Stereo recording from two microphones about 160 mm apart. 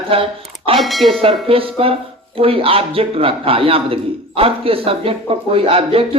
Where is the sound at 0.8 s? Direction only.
Centre (ahead or behind).